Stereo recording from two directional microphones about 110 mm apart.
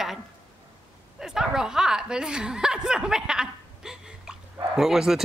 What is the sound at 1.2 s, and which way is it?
Speech, 5° right (ahead or behind).